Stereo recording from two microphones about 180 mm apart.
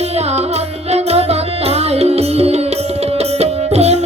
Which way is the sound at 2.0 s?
35° right (ahead or behind).